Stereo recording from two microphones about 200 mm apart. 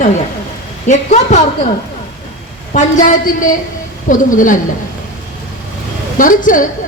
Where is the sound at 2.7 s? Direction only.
40° left (ahead or behind).